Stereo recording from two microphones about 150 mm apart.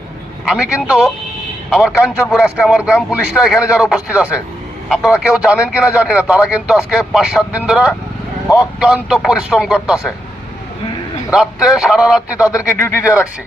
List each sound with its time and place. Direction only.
0.4 s a man's voice: 5° right (ahead or behind)
2.3 s a man's voice: 5° right (ahead or behind)
11.3 s a man's voice: 5° right (ahead or behind)
12.6 s speech: 15° left (ahead or behind)